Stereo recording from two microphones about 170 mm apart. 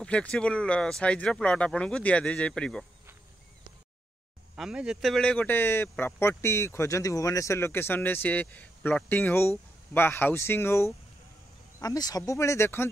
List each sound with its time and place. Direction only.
0.0 s speech: 5° left (ahead or behind)
4.6 s speech: 5° right (ahead or behind); by 12.9 s 15° left (ahead or behind)